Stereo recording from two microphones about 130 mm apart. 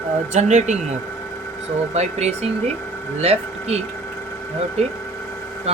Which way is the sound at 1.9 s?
60° right (ahead or behind).